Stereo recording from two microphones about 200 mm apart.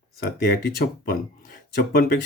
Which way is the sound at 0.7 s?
50° left (ahead or behind).